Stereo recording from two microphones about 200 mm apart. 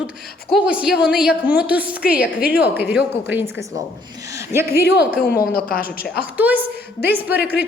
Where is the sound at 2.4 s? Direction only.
50° left (ahead or behind).